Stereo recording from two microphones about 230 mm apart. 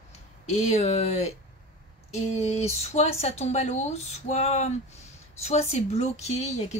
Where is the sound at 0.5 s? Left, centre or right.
Left.